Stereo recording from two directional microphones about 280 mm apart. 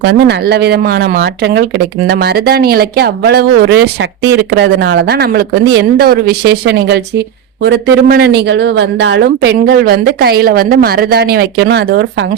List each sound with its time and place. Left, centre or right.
0.0 s speech: right